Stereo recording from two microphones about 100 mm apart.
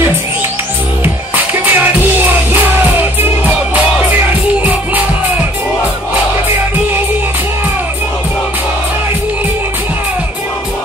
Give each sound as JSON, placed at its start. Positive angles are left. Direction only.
{"t": 1.0, "sound": "music", "side_deg": -20}